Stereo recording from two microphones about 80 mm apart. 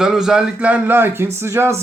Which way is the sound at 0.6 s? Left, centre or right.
Centre.